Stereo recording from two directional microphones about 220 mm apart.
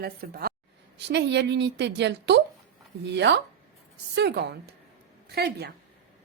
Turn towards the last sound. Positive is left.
turn(degrees=-45)  # may be behind; listen again after turning